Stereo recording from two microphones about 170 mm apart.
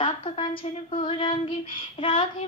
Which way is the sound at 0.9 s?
35° left (ahead or behind).